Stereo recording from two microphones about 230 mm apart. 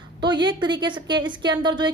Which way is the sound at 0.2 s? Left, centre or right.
Centre.